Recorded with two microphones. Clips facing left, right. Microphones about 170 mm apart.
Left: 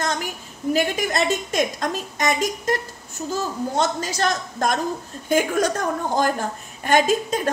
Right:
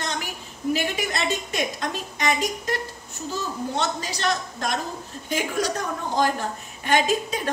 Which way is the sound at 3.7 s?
45° left (ahead or behind).